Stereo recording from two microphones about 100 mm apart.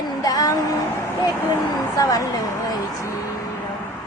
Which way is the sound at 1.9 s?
35° left (ahead or behind).